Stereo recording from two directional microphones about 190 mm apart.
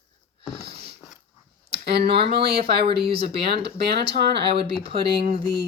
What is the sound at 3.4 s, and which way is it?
Speech, 60° right (ahead or behind).